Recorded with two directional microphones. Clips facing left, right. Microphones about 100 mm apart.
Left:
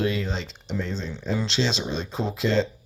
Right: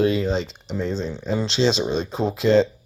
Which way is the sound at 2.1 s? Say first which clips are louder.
Right 6 dB; 50° right (ahead or behind).